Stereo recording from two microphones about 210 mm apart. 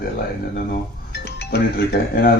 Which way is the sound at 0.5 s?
50° left (ahead or behind).